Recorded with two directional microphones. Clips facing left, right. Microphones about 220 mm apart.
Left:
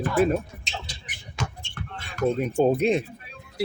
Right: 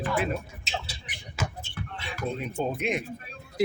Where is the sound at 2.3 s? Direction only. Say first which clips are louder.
Left 10 dB; 45° left (ahead or behind).